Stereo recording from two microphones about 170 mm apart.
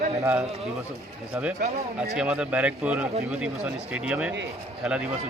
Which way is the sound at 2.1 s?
5° right (ahead or behind).